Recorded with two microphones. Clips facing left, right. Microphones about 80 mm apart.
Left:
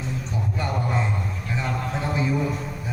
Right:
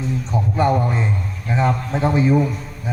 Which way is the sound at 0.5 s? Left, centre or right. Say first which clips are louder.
Right 9 dB; right.